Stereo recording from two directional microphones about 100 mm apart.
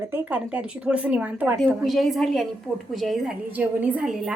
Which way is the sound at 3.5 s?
15° right (ahead or behind).